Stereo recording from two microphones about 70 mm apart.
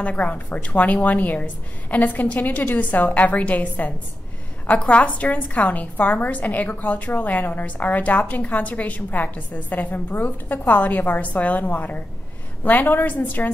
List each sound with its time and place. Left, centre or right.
0.0 s a woman's voice: centre